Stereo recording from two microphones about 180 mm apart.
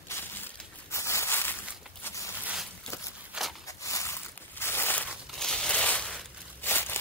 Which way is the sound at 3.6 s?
15° left (ahead or behind).